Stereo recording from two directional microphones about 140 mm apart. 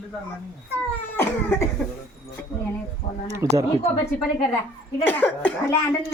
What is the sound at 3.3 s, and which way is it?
Speech, 20° right (ahead or behind).